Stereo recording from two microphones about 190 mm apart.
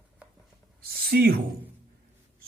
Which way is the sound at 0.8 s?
55° right (ahead or behind).